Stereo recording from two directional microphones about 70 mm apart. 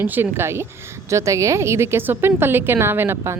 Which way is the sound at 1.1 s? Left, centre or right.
Right.